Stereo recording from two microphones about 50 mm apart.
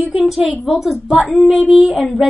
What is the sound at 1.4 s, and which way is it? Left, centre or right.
Speech, centre.